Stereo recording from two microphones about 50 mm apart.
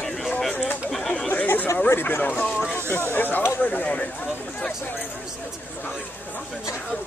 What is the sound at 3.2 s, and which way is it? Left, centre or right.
Speech, left.